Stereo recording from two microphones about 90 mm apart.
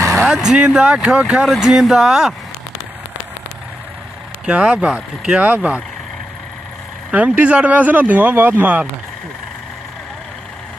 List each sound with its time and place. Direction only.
0.2 s speech: 5° right (ahead or behind)
4.5 s speech: 10° right (ahead or behind)
7.1 s speech: 15° right (ahead or behind)